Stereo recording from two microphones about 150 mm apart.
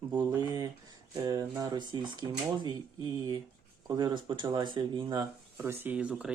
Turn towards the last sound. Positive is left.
turn(degrees=-10)  # may be behind; listen again after turning